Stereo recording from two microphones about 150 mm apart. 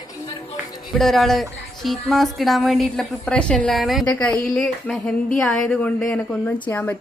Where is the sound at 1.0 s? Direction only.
Centre (ahead or behind).